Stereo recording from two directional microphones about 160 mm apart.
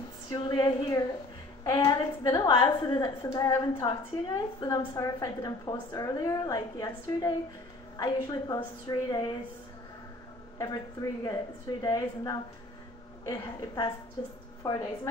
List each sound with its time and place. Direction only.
0.3 s a woman's voice: 30° left (ahead or behind)
10.6 s a woman's voice: 25° left (ahead or behind)